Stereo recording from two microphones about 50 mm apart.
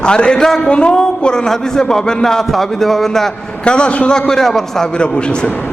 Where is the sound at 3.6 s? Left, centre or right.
Centre.